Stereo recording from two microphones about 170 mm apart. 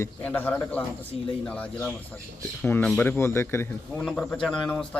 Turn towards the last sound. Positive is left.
turn(degrees=5)  # may be behind; listen again after turning